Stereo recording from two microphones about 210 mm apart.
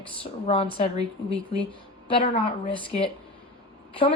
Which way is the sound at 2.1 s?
25° left (ahead or behind).